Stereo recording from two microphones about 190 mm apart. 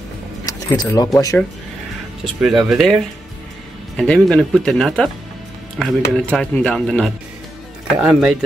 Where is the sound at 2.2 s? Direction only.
Centre (ahead or behind).